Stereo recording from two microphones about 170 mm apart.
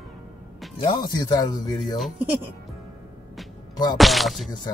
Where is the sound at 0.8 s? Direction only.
25° left (ahead or behind).